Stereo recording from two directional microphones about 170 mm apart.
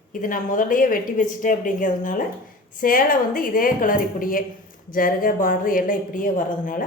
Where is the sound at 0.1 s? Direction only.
50° left (ahead or behind).